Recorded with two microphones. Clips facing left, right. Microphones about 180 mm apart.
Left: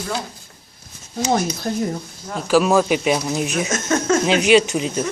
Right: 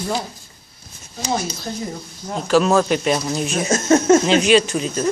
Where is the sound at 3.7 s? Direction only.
30° right (ahead or behind).